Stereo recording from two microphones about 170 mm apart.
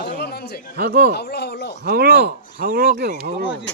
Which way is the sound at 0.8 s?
60° right (ahead or behind).